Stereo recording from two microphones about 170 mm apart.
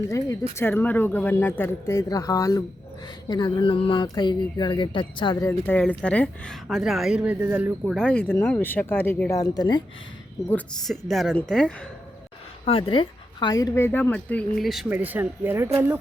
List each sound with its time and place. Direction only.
0.5 s speech: 10° left (ahead or behind)
5.5 s speech: 10° left (ahead or behind); by 9.8 s 25° left (ahead or behind)
10.5 s speech: centre (ahead or behind)
12.6 s speech: 30° left (ahead or behind); by 15.7 s 15° right (ahead or behind)